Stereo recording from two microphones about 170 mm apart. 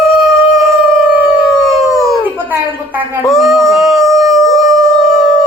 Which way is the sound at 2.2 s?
10° right (ahead or behind).